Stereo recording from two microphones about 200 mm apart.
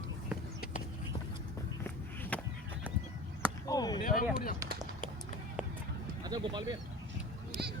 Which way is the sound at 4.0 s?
45° left (ahead or behind).